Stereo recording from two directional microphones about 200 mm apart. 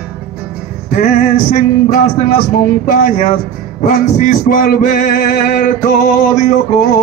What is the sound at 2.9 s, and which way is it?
Speech, 40° left (ahead or behind).